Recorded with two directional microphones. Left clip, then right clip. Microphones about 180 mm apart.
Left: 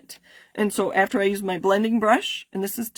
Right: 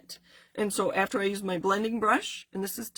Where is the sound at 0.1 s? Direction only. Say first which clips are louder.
Left 3 dB; 45° left (ahead or behind).